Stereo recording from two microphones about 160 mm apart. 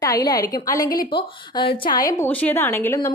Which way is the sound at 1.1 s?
30° left (ahead or behind).